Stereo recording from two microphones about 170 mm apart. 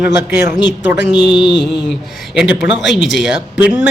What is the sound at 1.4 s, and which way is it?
Mantra, 25° left (ahead or behind).